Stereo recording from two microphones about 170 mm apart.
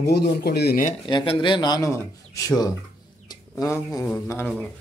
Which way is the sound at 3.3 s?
20° left (ahead or behind).